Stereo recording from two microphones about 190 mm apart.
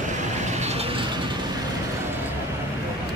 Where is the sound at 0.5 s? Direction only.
35° right (ahead or behind).